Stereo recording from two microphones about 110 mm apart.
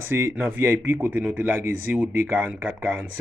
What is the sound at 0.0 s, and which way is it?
Speech, 20° right (ahead or behind).